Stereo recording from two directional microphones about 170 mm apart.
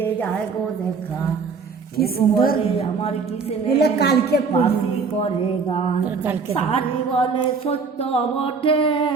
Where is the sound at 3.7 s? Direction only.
75° left (ahead or behind).